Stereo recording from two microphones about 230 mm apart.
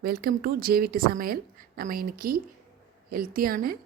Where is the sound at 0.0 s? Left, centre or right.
Right.